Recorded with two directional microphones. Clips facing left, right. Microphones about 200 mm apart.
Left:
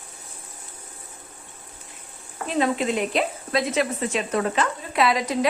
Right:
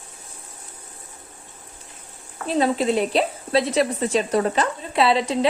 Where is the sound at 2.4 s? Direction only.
35° right (ahead or behind).